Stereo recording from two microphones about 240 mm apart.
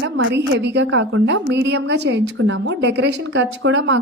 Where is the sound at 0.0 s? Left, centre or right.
Right.